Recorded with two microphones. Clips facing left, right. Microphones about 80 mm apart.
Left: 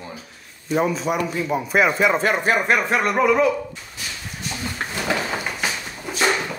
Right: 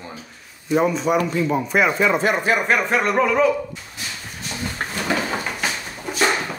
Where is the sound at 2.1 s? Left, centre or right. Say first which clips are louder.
Even; left.